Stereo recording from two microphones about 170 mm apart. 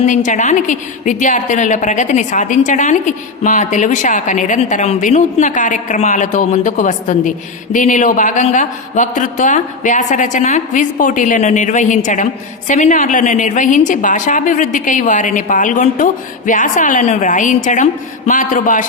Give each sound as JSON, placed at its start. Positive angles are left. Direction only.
{"t": 0.0, "sound": "a woman's voice", "side_deg": 45}